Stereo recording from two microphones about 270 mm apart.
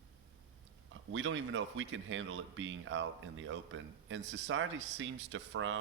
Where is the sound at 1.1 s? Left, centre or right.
Right.